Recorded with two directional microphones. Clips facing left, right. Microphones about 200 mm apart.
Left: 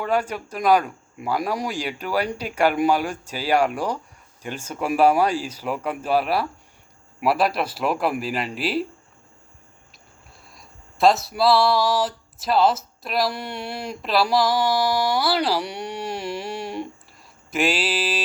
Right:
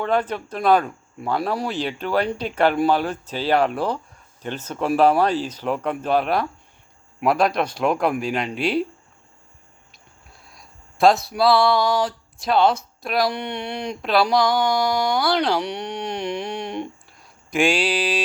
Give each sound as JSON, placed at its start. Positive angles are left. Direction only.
{"t": 0.0, "sound": "speech", "side_deg": 10}
{"t": 10.4, "sound": "speech", "side_deg": 0}